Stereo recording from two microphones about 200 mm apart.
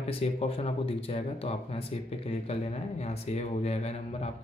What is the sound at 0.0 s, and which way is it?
Speech, 30° left (ahead or behind).